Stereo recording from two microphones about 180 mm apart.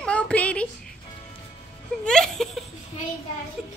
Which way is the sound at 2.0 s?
5° left (ahead or behind).